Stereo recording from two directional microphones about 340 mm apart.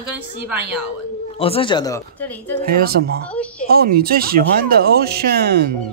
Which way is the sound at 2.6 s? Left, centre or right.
Right.